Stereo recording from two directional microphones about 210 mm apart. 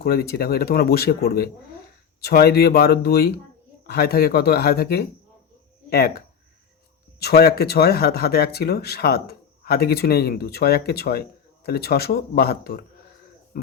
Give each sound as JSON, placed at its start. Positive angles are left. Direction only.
{"t": 0.0, "sound": "speech", "side_deg": 45}